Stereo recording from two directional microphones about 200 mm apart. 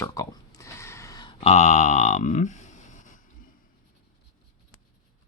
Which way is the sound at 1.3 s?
35° left (ahead or behind).